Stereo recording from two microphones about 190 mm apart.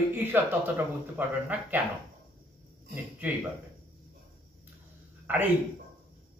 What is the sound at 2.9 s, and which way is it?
Speech, 10° right (ahead or behind).